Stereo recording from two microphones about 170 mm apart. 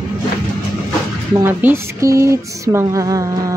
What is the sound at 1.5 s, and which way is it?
Speech, 10° right (ahead or behind).